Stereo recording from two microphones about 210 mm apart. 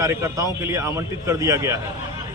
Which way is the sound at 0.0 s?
15° right (ahead or behind).